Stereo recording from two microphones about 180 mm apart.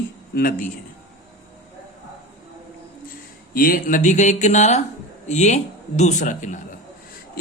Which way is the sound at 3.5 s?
55° left (ahead or behind).